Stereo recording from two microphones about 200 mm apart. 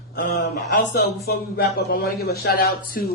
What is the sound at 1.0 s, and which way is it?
A man's voice, 55° left (ahead or behind).